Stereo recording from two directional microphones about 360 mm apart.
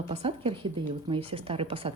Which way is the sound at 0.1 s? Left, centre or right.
Centre.